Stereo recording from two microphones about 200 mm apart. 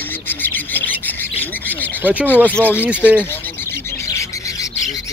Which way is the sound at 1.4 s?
10° left (ahead or behind).